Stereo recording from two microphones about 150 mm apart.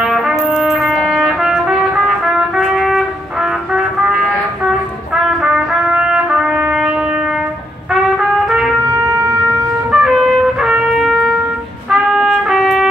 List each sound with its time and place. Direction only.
0.0 s trumpet: centre (ahead or behind)
3.7 s music: 5° right (ahead or behind)
4.6 s trumpet: 5° right (ahead or behind)
7.9 s trumpet: 5° right (ahead or behind)
8.9 s wind instrument: 20° right (ahead or behind)
9.8 s trumpet: 5° right (ahead or behind)